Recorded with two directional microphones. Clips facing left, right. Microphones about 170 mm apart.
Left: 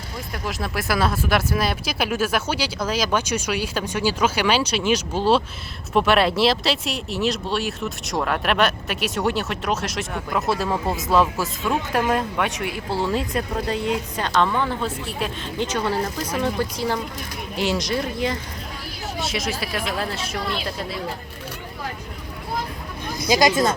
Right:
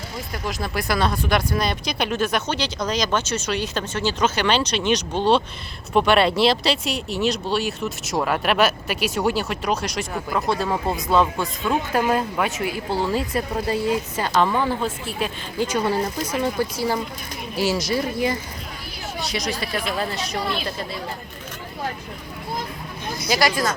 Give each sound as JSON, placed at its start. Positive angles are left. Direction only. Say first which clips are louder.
{"t": 0.4, "sound": "speech", "louder": "even", "side_deg": 0}
{"t": 19.2, "sound": "speech", "louder": "even", "side_deg": 0}
{"t": 23.3, "sound": "speech", "louder": "left 3 dB", "side_deg": 20}